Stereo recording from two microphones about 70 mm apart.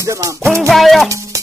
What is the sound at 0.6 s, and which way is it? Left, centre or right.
Music, centre.